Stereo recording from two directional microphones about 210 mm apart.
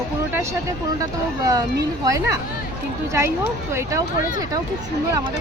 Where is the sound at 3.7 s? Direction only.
15° right (ahead or behind).